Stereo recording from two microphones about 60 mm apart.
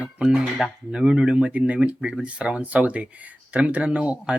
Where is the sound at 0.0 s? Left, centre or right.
Centre.